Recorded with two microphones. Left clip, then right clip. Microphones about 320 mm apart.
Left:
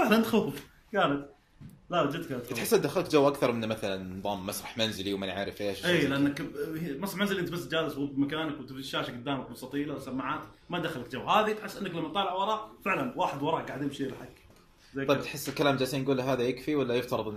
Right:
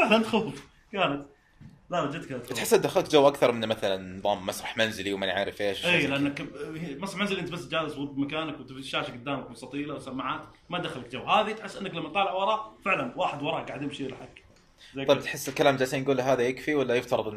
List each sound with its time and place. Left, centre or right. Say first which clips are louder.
0.0 s speech: right 3 dB; centre
1.9 s speech: left 1 dB; centre
2.5 s speech: right 4 dB; centre
6.0 s speech: right 1 dB; centre
15.0 s speech: right 5 dB; centre